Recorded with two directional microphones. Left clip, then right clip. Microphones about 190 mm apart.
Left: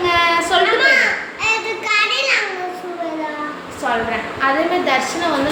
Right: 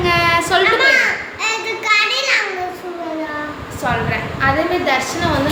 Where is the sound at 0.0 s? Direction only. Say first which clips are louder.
Even; 5° right (ahead or behind).